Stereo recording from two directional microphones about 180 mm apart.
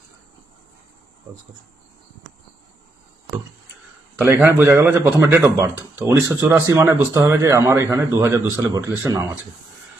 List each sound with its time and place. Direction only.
4.2 s speech: 10° right (ahead or behind)